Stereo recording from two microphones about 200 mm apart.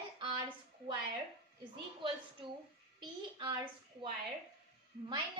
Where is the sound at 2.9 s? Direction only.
25° right (ahead or behind).